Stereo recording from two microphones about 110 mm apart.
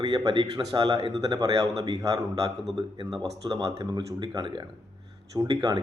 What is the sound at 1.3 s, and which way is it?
Speech, 35° right (ahead or behind).